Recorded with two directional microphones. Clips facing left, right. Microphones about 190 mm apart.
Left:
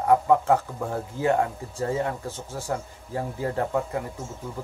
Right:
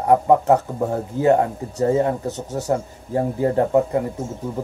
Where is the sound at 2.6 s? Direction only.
40° right (ahead or behind).